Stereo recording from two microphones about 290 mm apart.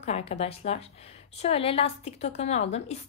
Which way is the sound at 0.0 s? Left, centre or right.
Left.